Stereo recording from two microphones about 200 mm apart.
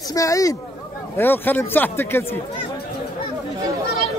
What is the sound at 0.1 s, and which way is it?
Speech, 15° left (ahead or behind).